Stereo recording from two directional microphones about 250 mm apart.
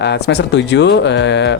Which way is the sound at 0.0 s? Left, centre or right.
Left.